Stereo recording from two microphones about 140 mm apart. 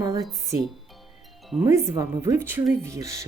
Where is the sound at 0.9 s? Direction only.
Centre (ahead or behind).